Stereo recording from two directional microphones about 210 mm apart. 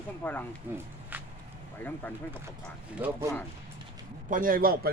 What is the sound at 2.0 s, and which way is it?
Speech, 10° left (ahead or behind).